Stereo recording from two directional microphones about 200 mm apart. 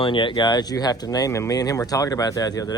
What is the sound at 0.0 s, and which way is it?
Speech, 25° left (ahead or behind).